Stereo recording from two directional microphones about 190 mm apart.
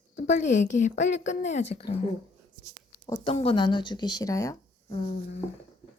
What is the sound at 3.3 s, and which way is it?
Speech, 30° left (ahead or behind).